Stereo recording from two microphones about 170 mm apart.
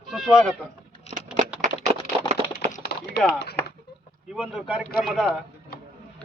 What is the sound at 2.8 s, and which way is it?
Typing, 75° left (ahead or behind).